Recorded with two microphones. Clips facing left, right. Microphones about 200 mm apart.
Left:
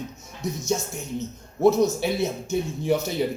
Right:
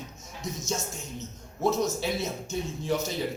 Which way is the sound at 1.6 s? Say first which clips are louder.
Left 7 dB; 60° left (ahead or behind).